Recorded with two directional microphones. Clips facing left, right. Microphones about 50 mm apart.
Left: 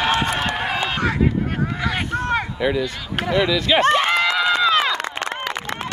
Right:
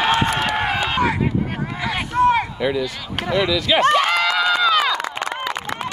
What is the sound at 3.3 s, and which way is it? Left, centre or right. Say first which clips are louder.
Speech: even; left.